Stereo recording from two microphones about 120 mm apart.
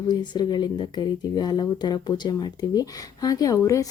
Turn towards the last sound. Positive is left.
turn(degrees=25)  # may be behind; listen again after turning